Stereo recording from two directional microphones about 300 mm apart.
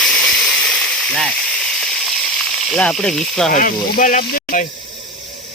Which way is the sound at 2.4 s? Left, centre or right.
Centre.